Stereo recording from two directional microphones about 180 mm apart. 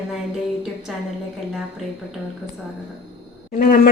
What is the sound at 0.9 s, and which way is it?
Speech, centre (ahead or behind).